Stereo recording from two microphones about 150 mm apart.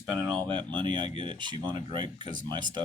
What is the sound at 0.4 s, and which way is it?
Speech, 30° right (ahead or behind).